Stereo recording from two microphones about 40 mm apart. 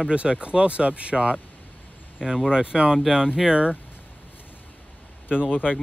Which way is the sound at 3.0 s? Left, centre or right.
Centre.